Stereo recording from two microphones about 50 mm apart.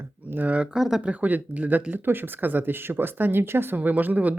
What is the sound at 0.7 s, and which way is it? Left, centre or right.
Speech, centre.